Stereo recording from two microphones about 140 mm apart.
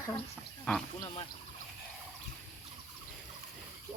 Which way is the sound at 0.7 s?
10° left (ahead or behind).